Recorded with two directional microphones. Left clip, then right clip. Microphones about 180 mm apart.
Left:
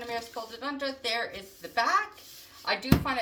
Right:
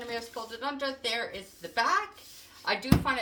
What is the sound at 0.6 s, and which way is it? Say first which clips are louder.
A woman's voice: right 1 dB; 30° right (ahead or behind).